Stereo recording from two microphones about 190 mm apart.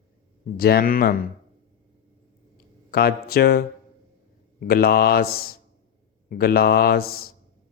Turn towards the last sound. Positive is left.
turn(degrees=55)  # may be behind; listen again after turning